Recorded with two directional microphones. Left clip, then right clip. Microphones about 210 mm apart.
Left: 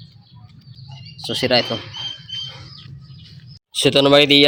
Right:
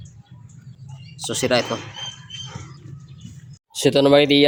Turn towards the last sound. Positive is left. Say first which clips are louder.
# left 2 dB
turn(degrees=0)  # may be behind; listen again after turning